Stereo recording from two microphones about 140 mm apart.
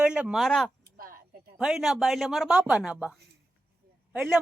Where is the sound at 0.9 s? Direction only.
90° right.